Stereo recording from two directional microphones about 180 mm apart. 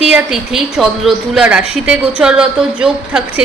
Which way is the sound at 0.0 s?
5° right (ahead or behind).